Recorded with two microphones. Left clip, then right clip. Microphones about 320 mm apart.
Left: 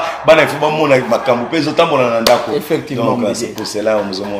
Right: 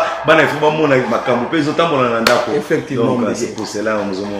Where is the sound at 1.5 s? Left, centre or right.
Centre.